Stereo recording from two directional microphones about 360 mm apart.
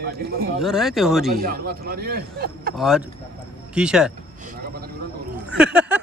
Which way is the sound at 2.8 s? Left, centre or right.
Centre.